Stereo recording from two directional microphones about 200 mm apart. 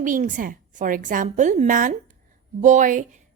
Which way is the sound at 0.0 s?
40° right (ahead or behind).